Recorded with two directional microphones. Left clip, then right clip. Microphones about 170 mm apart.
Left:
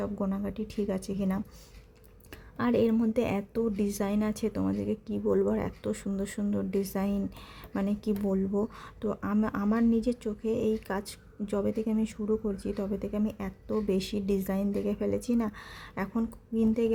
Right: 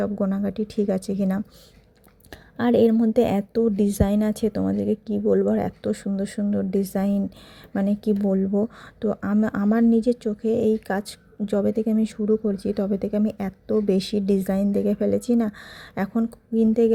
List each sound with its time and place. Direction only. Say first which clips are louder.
0.0 s a woman's voice: right 8 dB; 30° right (ahead or behind)